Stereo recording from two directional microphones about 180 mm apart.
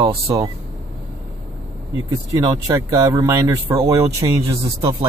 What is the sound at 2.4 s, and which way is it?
Speech, 20° right (ahead or behind).